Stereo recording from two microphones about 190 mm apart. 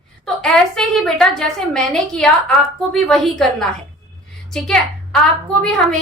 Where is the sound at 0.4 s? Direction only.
Centre (ahead or behind).